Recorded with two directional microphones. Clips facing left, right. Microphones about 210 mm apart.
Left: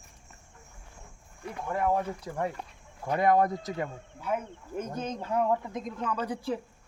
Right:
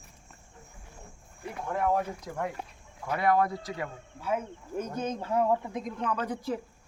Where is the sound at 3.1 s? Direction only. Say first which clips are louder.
Left 2 dB; 45° left (ahead or behind).